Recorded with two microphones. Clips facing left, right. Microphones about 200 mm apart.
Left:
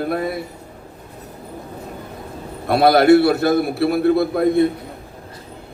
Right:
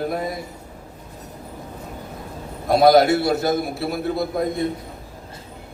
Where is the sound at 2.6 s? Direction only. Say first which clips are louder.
Left 1 dB; 60° left (ahead or behind).